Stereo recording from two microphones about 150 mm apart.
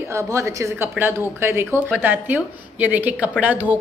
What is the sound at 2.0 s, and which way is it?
A woman's voice, 10° right (ahead or behind).